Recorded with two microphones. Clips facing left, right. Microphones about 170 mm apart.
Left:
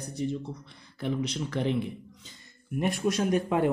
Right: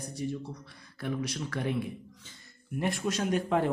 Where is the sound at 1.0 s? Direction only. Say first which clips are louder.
Left 3 dB; 25° left (ahead or behind).